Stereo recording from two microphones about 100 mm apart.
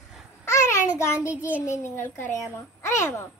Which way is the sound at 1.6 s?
25° left (ahead or behind).